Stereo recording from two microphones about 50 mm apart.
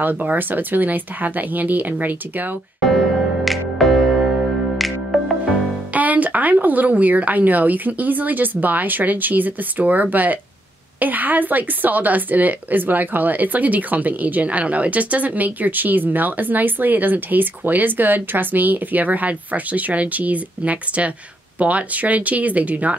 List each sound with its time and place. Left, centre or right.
0.0 s a woman's voice: right
3.4 s music: centre
5.9 s a woman's voice: right